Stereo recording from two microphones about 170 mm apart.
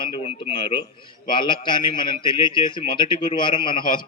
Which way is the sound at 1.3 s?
25° left (ahead or behind).